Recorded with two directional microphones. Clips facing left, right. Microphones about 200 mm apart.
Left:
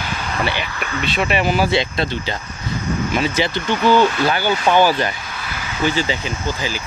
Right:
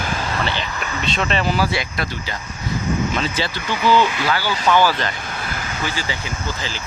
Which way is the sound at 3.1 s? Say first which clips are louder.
Left 4 dB; 15° left (ahead or behind).